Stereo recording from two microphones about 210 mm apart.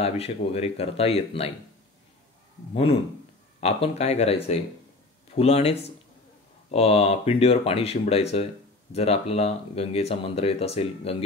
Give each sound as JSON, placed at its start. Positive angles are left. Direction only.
{"t": 0.0, "sound": "speech", "side_deg": 30}
{"t": 2.7, "sound": "speech", "side_deg": 25}